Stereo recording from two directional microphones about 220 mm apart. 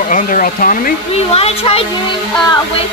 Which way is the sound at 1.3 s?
25° left (ahead or behind).